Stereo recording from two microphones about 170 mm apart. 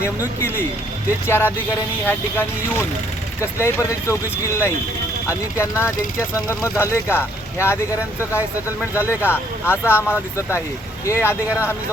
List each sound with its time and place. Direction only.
1.3 s speech: 15° left (ahead or behind)